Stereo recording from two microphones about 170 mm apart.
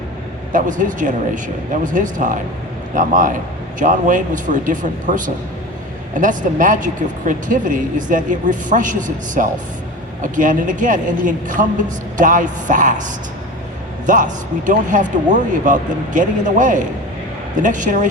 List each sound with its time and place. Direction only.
0.5 s speech: 50° right (ahead or behind)
14.1 s speech: 50° right (ahead or behind)